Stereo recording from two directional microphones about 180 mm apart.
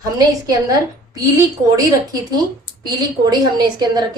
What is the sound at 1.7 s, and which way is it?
A woman's voice, 20° right (ahead or behind).